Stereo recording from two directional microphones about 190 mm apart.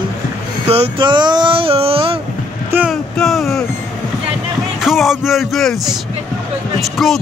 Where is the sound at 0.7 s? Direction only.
30° right (ahead or behind).